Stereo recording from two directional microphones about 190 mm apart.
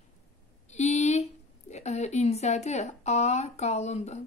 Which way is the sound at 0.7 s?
35° left (ahead or behind).